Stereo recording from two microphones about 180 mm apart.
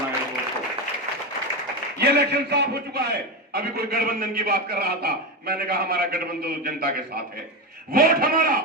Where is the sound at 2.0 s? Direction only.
65° right (ahead or behind).